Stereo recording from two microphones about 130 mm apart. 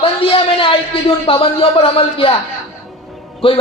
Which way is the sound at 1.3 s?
45° left (ahead or behind).